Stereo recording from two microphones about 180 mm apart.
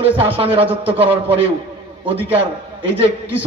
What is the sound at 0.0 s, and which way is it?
A man's voice, 30° right (ahead or behind).